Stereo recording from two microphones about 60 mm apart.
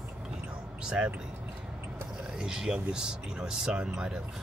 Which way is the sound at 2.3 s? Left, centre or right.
Centre.